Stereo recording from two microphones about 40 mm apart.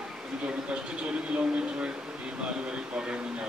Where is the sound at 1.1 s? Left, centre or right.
Right.